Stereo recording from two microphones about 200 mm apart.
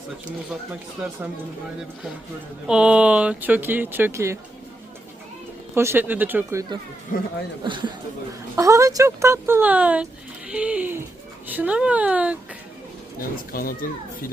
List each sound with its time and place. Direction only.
2.6 s speech: 5° right (ahead or behind)
5.7 s speech: 10° right (ahead or behind)
13.5 s speech: 45° left (ahead or behind)